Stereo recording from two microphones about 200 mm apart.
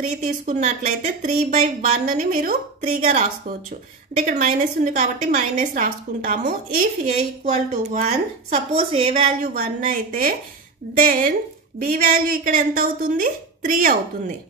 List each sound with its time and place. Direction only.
0.2 s speech: 40° right (ahead or behind)
9.5 s speech: 45° right (ahead or behind)